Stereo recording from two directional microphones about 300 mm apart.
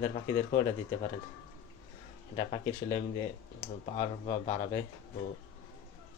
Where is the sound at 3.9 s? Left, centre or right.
Centre.